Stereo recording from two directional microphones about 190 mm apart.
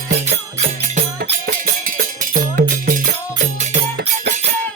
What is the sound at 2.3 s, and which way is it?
Music, 45° right (ahead or behind).